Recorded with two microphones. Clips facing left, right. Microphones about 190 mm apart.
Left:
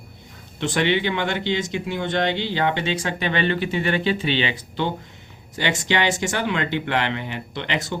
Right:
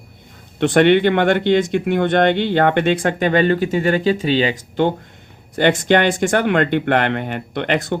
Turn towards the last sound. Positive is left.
turn(degrees=-55)  # may be behind; listen again after turning